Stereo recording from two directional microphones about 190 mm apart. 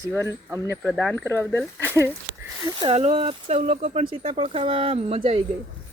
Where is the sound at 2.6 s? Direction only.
25° right (ahead or behind).